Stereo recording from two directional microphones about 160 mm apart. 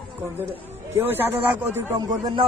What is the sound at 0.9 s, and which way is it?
A man's voice, 15° right (ahead or behind).